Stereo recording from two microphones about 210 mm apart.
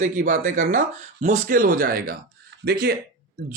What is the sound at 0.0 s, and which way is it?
Speech, 40° right (ahead or behind).